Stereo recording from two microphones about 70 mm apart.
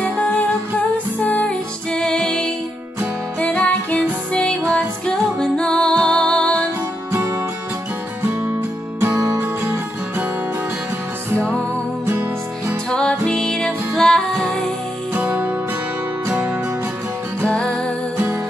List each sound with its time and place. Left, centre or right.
0.0 s music: left
9.4 s music: right
12.1 s music: right
12.9 s music: centre
15.1 s music: centre
17.4 s music: centre